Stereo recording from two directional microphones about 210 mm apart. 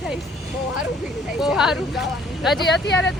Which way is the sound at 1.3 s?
Centre (ahead or behind).